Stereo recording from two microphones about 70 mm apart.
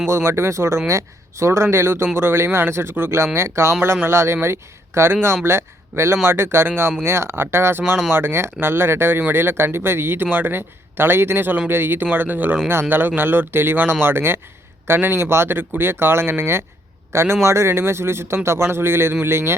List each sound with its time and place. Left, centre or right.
0.1 s a man's voice: right